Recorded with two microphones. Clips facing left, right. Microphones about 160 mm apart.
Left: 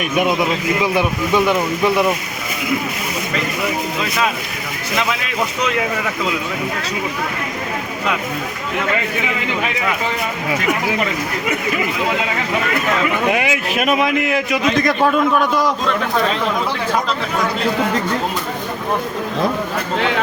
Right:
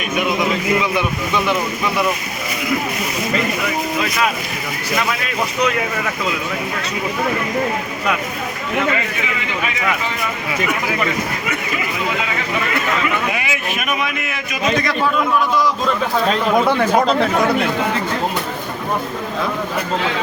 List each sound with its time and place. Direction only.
13.3 s speech: 85° left